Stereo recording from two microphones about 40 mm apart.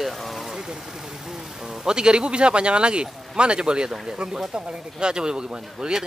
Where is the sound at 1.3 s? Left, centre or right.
Centre.